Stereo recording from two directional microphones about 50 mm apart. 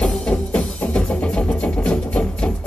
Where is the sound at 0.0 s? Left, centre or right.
Centre.